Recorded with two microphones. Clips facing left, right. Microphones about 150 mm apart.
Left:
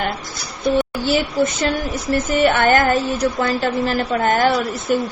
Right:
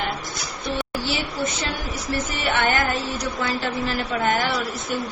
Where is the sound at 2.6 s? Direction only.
45° left (ahead or behind).